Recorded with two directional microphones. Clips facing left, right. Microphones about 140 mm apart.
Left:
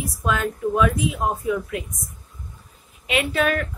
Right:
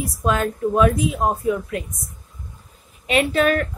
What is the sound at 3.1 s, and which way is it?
Speech, 40° right (ahead or behind).